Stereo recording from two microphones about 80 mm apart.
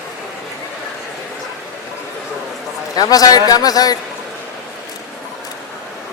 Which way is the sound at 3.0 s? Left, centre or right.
Left.